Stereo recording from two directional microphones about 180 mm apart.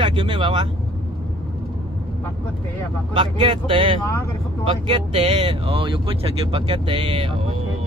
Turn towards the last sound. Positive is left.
turn(degrees=-30)  # may be behind; listen again after turning